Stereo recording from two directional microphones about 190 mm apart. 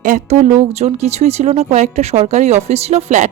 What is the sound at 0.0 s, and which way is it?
Speech, 40° right (ahead or behind).